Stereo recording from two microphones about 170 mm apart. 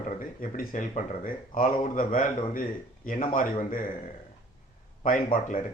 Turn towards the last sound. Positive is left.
turn(degrees=50)  # may be behind; listen again after turning